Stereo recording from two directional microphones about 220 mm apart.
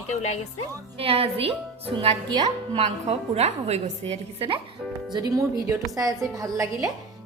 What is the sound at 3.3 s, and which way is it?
A woman's voice, 30° right (ahead or behind).